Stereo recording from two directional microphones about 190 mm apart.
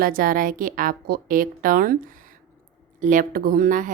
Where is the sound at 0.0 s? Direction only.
50° right (ahead or behind).